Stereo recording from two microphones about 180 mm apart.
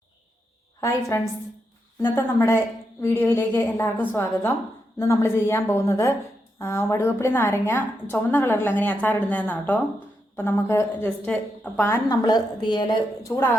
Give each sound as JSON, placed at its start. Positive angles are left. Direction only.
{"t": 0.8, "sound": "a woman's voice", "side_deg": 15}